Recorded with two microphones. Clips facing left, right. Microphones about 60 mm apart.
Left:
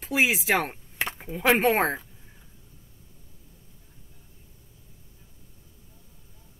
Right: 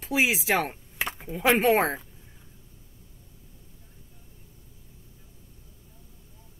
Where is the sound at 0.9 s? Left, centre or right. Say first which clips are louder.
Left 2 dB; centre.